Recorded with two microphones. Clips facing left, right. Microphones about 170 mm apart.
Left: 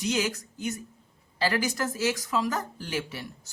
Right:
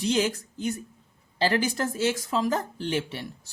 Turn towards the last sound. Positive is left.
turn(degrees=-25)  # may be behind; listen again after turning